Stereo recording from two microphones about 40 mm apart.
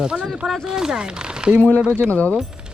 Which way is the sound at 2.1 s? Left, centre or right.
Left.